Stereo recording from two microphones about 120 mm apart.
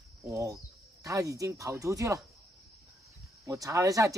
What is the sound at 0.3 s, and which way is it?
A man's voice, 30° right (ahead or behind).